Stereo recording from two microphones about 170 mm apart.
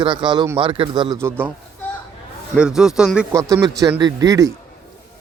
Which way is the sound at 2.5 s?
5° right (ahead or behind).